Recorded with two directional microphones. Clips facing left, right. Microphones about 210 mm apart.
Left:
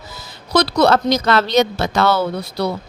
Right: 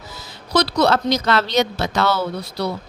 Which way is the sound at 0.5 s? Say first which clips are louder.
Left 3 dB; 55° left (ahead or behind).